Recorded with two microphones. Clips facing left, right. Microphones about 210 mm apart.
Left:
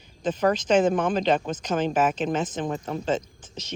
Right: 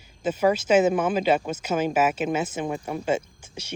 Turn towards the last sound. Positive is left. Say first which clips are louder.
# even
turn(degrees=-10)  # may be behind; listen again after turning